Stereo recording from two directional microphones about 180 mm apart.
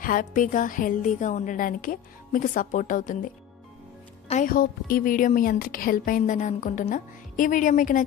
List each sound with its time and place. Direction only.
0.0 s a woman's voice: 50° left (ahead or behind)
4.3 s a woman's voice: 45° left (ahead or behind)